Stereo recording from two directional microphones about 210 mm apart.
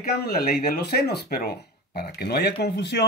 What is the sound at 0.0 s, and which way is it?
Speech, 45° left (ahead or behind).